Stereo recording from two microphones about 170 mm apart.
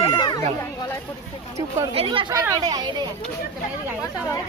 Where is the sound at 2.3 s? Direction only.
20° right (ahead or behind).